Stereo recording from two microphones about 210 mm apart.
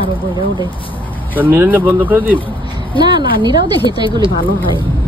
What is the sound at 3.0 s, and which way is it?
A woman's voice, 20° right (ahead or behind).